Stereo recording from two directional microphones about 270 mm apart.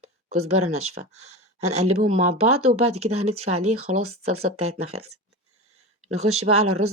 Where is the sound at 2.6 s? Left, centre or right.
Right.